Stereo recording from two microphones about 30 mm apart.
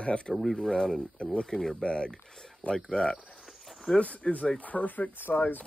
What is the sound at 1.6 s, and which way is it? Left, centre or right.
Speech, centre.